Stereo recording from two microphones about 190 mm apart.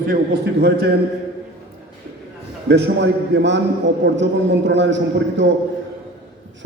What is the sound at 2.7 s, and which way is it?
A man's voice, 65° right (ahead or behind).